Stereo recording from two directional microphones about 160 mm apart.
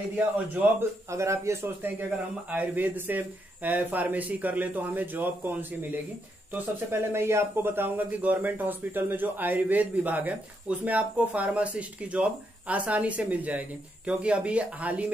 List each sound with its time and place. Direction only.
0.2 s speech: 10° right (ahead or behind)